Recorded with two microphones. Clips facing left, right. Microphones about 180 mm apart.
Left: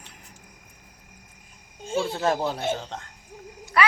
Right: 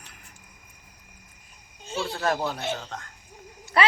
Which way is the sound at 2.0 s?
25° left (ahead or behind).